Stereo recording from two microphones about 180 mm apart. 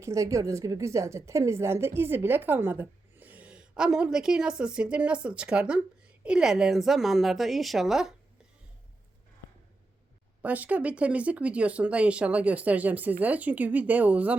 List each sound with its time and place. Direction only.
0.0 s a woman's voice: 15° right (ahead or behind)
10.4 s a woman's voice: 10° right (ahead or behind)